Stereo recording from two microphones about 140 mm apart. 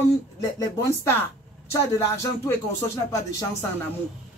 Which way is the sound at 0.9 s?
15° left (ahead or behind).